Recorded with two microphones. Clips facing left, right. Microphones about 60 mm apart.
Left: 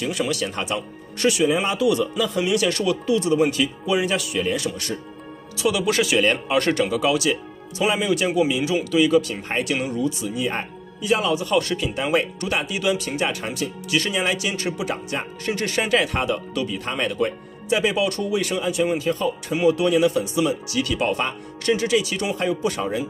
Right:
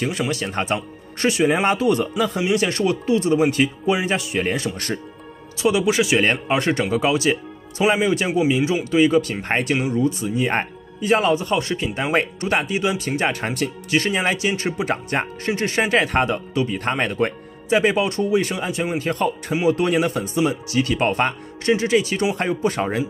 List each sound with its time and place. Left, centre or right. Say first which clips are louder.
0.3 s speech: right 2 dB; right
1.5 s speech: right 3 dB; right
1.8 s speech: right 1 dB; right
5.6 s speech: right 2 dB; right
10.5 s music: right 6 dB; right
11.1 s speech: right 3 dB; right
15.4 s speech: right 1 dB; right
18.9 s speech: right 1 dB; right